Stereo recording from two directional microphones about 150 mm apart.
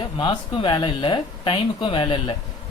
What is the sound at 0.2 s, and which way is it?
Speech, 35° left (ahead or behind).